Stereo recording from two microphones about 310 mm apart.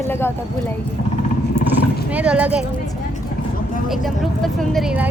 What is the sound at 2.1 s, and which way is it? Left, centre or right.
Speech, centre.